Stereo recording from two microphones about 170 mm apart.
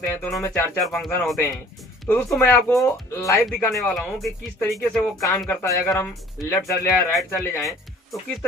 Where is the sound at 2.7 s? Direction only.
20° left (ahead or behind).